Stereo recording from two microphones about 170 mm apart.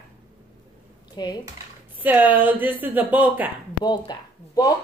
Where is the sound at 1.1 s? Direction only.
25° left (ahead or behind).